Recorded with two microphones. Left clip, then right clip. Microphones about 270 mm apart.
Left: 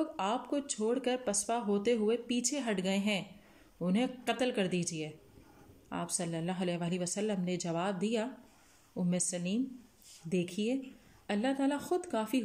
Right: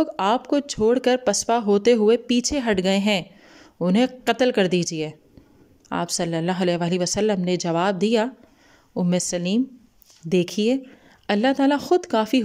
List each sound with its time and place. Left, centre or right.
0.0 s speech: right